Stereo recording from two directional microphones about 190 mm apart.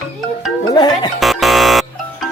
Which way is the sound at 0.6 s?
20° left (ahead or behind).